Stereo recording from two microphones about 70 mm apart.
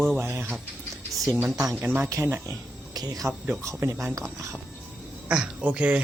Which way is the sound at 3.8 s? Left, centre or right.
Right.